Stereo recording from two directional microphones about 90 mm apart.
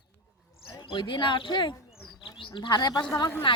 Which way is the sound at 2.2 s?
70° left (ahead or behind).